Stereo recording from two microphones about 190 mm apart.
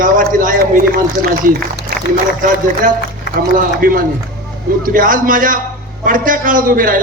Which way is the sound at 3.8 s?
45° right (ahead or behind).